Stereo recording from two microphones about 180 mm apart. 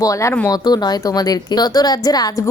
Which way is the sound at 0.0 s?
15° left (ahead or behind).